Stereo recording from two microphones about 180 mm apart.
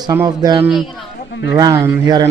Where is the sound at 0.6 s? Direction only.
Centre (ahead or behind).